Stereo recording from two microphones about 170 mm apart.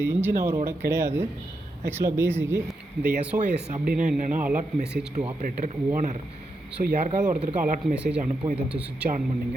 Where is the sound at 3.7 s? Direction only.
55° right (ahead or behind).